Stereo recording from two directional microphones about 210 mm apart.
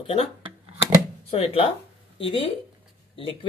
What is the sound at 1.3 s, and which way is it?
Speech, 25° left (ahead or behind).